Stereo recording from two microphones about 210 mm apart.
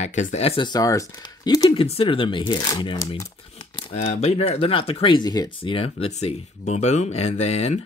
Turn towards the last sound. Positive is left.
turn(degrees=30)  # may be behind; listen again after turning